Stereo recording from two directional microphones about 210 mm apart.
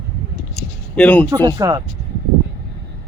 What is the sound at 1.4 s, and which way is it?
Speech, 15° right (ahead or behind).